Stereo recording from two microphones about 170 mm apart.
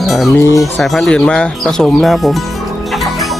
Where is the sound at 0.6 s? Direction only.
Centre (ahead or behind).